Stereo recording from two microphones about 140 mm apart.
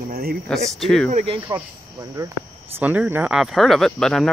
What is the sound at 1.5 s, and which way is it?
Speech, 30° right (ahead or behind).